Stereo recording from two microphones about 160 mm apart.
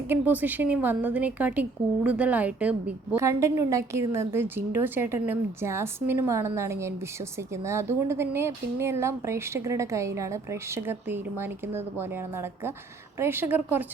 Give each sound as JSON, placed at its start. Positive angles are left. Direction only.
{"t": 0.1, "sound": "a woman's voice", "side_deg": -10}